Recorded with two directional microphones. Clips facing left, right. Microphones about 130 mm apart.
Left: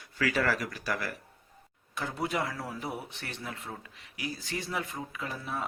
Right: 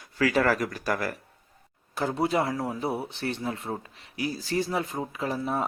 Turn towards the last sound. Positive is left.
turn(degrees=-35)  # may be behind; listen again after turning